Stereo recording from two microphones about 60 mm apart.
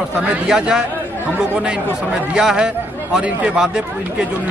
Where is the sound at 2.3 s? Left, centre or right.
Centre.